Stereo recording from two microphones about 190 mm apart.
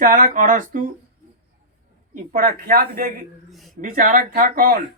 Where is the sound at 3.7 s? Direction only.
45° right (ahead or behind).